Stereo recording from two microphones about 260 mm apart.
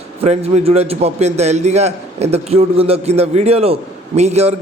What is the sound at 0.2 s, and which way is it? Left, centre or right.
A man's voice, right.